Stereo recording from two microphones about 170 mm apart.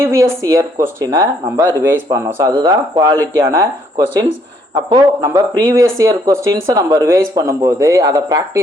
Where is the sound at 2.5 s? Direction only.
30° right (ahead or behind).